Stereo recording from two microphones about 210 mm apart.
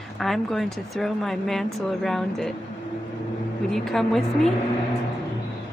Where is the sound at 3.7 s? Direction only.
Centre (ahead or behind).